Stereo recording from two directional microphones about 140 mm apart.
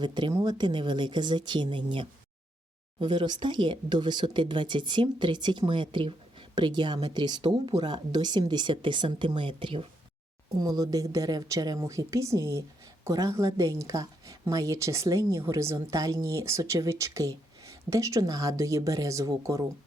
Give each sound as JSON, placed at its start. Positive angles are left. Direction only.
{"t": 0.0, "sound": "speech", "side_deg": -30}
{"t": 10.5, "sound": "a woman's voice", "side_deg": -25}